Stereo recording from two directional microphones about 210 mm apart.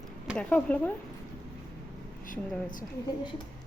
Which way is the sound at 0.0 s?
5° left (ahead or behind).